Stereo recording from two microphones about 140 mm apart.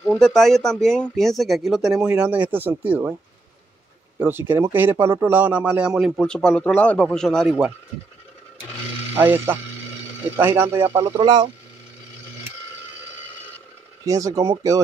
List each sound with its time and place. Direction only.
0.2 s speech: centre (ahead or behind); by 3.1 s 15° right (ahead or behind)
4.2 s speech: 15° right (ahead or behind); by 7.5 s centre (ahead or behind)
9.1 s speech: 15° right (ahead or behind)
11.1 s speech: 30° right (ahead or behind)
14.0 s speech: 25° right (ahead or behind)